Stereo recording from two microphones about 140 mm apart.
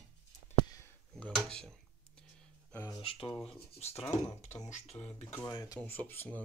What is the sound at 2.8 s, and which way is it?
Speech, 25° left (ahead or behind).